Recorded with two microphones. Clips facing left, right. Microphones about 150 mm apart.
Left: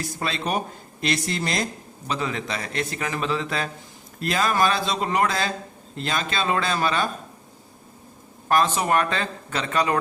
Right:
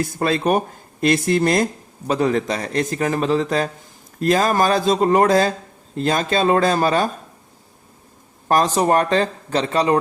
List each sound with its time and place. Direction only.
0.0 s a man's voice: 50° right (ahead or behind)
8.4 s a man's voice: 40° right (ahead or behind)